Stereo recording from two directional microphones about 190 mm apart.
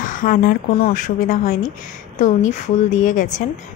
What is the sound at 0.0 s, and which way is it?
Speech, 45° left (ahead or behind).